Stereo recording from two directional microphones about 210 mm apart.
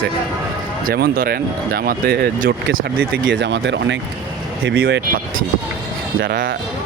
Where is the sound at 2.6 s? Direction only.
60° right (ahead or behind).